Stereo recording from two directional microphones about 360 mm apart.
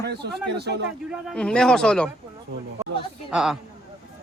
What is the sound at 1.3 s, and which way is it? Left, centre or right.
Speech, centre.